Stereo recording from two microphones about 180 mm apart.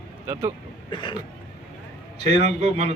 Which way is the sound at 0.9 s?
25° left (ahead or behind).